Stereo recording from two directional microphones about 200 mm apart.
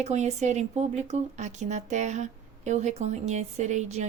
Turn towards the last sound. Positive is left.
turn(degrees=-35)  # may be behind; listen again after turning